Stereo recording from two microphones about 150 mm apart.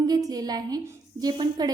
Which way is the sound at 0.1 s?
25° right (ahead or behind).